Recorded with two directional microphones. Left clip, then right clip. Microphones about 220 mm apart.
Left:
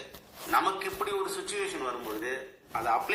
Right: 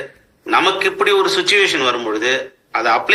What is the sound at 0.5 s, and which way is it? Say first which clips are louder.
A man's voice: right 13 dB; 50° right (ahead or behind).